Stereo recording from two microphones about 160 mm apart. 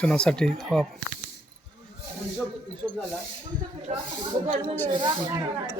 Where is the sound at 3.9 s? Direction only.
45° right (ahead or behind).